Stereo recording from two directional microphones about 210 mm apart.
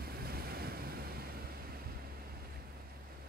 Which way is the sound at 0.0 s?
45° right (ahead or behind).